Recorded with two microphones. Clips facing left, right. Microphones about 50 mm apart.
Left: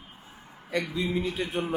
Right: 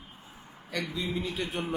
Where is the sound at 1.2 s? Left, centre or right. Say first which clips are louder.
Left 3 dB; centre.